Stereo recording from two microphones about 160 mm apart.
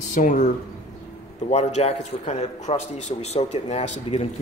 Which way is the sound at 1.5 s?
45° left (ahead or behind).